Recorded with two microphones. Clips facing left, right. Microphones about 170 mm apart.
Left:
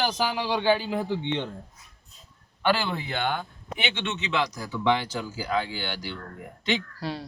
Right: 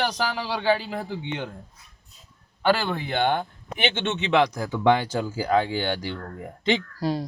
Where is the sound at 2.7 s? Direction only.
45° right (ahead or behind).